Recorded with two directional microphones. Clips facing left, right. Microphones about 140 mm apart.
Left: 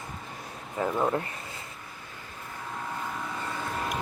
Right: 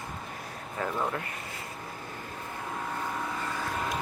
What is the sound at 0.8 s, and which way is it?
Speech, 15° left (ahead or behind).